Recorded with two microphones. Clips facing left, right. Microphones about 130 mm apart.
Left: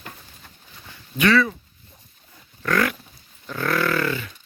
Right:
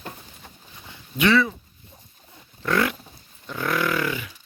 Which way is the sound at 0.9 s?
20° right (ahead or behind).